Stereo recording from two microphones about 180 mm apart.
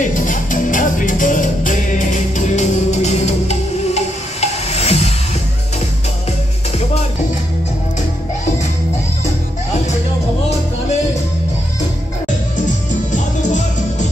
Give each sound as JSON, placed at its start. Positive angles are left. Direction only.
{"t": 0.0, "sound": "music", "side_deg": 45}
{"t": 6.8, "sound": "music", "side_deg": 35}
{"t": 13.1, "sound": "music", "side_deg": 45}